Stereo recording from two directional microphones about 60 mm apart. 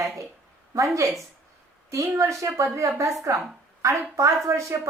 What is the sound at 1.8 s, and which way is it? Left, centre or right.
A woman's voice, right.